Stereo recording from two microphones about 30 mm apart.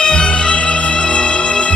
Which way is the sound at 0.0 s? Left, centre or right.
Left.